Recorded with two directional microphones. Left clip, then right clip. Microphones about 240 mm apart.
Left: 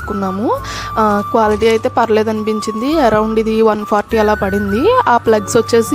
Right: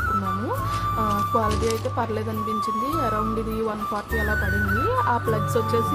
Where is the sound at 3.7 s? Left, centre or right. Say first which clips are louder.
Left 13 dB; left.